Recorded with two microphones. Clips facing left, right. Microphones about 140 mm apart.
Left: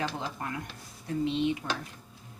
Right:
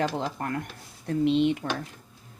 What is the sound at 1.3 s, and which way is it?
Dishes, 70° right (ahead or behind).